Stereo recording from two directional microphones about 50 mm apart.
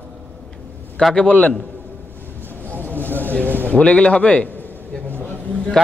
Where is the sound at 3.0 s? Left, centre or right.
Right.